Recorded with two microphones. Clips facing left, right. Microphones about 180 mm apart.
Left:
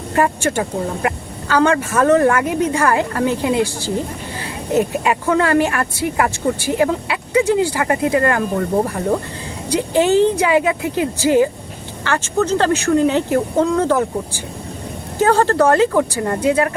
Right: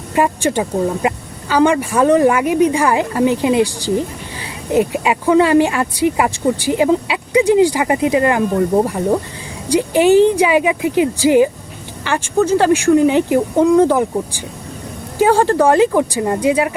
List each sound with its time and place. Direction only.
0.1 s speech: 15° right (ahead or behind)